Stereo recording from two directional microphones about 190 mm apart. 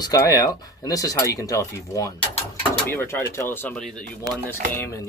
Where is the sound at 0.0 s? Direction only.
20° left (ahead or behind).